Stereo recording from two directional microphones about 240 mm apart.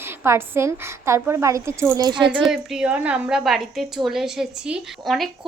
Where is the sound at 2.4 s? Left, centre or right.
Centre.